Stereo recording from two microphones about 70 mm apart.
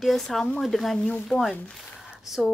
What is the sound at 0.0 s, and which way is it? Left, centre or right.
A woman's voice, centre.